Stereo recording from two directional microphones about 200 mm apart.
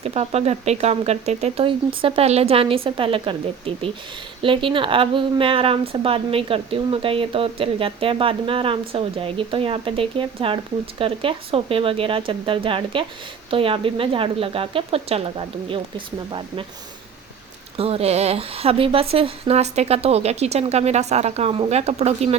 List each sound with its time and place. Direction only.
0.0 s a woman's voice: 30° right (ahead or behind)
17.7 s a woman's voice: 30° right (ahead or behind)